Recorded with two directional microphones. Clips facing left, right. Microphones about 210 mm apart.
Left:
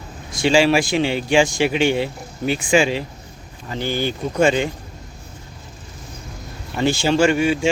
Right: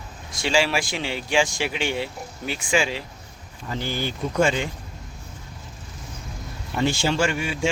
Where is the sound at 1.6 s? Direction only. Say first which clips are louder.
Left 9 dB; 70° left (ahead or behind).